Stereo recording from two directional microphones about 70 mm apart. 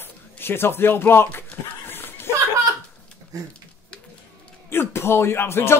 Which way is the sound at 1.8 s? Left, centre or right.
Left.